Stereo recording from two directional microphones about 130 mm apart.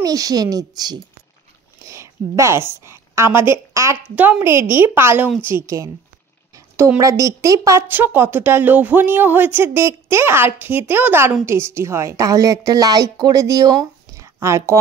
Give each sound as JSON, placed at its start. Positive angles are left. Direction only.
{"t": 0.0, "sound": "a woman's voice", "side_deg": -30}
{"t": 4.1, "sound": "a woman's voice", "side_deg": -10}
{"t": 7.0, "sound": "a woman's voice", "side_deg": -25}